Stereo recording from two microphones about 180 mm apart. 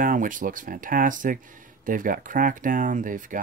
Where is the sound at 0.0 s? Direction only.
50° right (ahead or behind).